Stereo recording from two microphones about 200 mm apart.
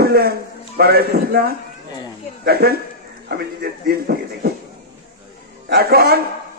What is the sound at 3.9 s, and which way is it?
Speech, 50° right (ahead or behind).